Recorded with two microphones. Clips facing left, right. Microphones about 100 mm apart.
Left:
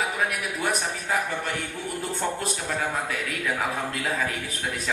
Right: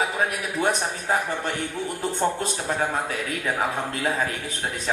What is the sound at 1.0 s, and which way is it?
Speech, 35° right (ahead or behind).